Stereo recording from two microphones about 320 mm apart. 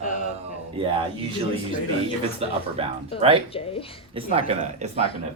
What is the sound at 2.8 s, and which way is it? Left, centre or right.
Speech, centre.